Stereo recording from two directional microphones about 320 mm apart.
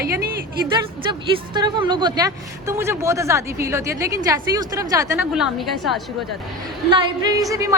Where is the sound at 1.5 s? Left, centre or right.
Centre.